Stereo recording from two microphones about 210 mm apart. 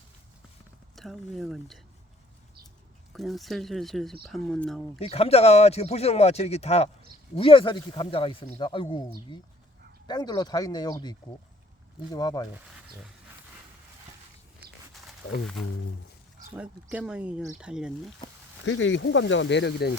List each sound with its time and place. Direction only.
0.9 s speech: centre (ahead or behind)
3.1 s speech: centre (ahead or behind)
4.9 s speech: 30° left (ahead or behind)
16.6 s speech: 5° right (ahead or behind)
18.6 s speech: 65° left (ahead or behind)